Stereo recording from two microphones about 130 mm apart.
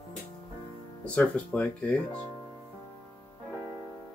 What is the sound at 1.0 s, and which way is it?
Speech, 10° left (ahead or behind).